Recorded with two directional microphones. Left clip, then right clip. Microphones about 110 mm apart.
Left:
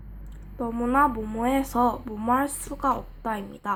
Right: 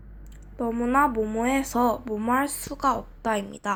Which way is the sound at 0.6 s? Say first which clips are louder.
Even; 25° right (ahead or behind).